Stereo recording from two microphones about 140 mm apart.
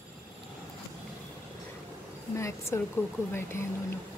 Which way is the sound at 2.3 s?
20° left (ahead or behind).